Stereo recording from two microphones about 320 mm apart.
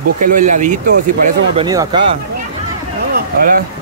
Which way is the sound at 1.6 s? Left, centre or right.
Centre.